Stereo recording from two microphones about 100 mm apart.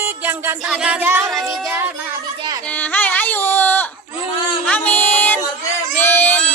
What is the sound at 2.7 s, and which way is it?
Carnatic music, 15° left (ahead or behind).